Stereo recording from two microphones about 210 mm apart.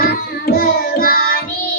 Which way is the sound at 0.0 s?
45° left (ahead or behind).